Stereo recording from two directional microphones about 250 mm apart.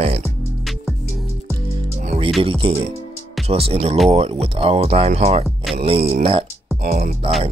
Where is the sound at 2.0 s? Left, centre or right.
Right.